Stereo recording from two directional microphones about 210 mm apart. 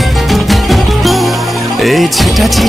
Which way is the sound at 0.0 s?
Centre (ahead or behind).